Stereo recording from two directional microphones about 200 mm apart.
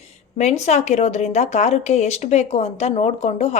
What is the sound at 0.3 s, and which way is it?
A woman's voice, 35° left (ahead or behind).